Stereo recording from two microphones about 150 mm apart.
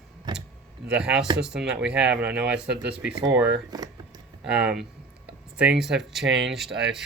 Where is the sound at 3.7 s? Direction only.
25° right (ahead or behind).